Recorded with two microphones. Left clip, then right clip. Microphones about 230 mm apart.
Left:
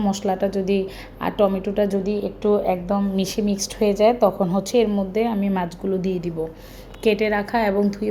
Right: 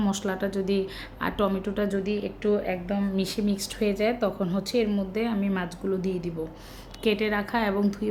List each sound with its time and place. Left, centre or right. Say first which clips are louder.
0.0 s speech: left 7 dB; centre
2.1 s a woman's voice: left 7 dB; left
3.2 s a woman's voice: left 5 dB; centre